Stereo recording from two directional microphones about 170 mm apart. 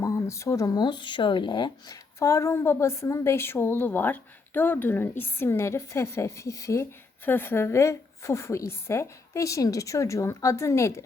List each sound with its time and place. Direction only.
0.0 s speech: 20° left (ahead or behind)